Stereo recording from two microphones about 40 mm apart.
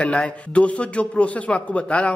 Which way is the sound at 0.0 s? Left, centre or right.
Left.